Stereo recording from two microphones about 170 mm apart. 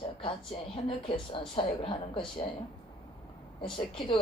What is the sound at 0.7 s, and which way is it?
A woman's voice, 30° left (ahead or behind).